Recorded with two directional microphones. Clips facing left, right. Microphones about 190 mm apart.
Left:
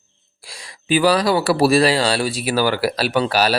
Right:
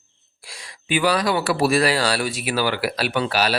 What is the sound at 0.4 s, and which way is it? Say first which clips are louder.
Speech: left 6 dB; 35° left (ahead or behind).